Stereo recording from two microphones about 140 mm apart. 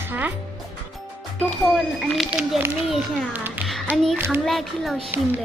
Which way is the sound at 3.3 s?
15° right (ahead or behind).